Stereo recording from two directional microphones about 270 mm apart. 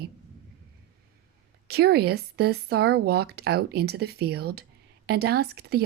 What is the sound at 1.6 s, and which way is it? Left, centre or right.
A woman's voice, right.